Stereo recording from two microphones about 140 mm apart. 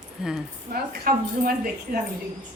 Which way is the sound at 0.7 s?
90° right.